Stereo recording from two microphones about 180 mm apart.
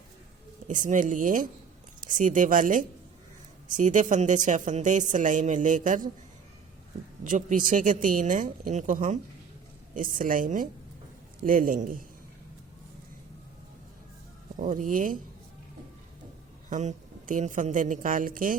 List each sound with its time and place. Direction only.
0.7 s speech: 45° right (ahead or behind)
7.3 s speech: 45° right (ahead or behind)
14.5 s speech: 45° right (ahead or behind)
16.6 s speech: 45° right (ahead or behind)